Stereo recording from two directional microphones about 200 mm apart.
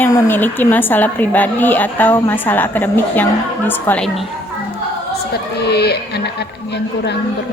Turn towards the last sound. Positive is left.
turn(degrees=55)  # may be behind; listen again after turning